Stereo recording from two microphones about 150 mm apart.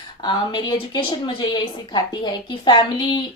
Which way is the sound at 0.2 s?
30° left (ahead or behind).